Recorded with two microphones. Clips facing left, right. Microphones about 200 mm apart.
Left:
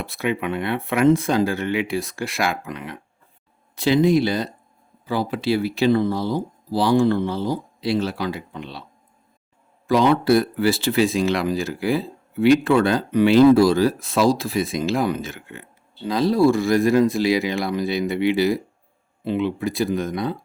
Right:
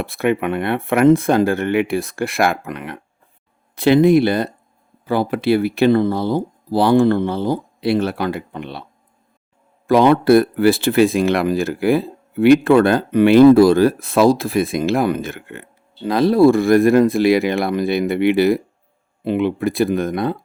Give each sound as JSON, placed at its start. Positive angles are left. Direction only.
{"t": 0.0, "sound": "speech", "side_deg": -55}
{"t": 9.8, "sound": "speech", "side_deg": -55}